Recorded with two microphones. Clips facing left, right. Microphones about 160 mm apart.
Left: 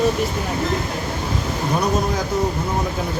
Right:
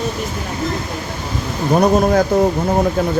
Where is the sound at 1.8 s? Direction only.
60° right (ahead or behind).